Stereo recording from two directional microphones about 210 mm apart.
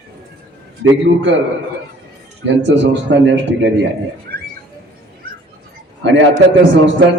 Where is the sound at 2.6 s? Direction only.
60° right (ahead or behind).